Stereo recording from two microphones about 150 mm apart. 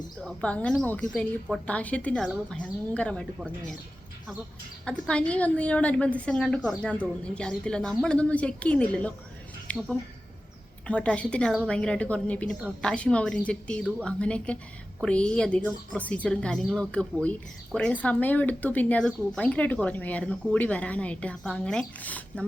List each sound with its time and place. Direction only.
0.2 s a woman's voice: 5° left (ahead or behind)
4.9 s a woman's voice: 5° left (ahead or behind)